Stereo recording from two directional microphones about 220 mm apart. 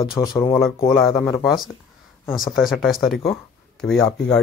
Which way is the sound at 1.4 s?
Centre (ahead or behind).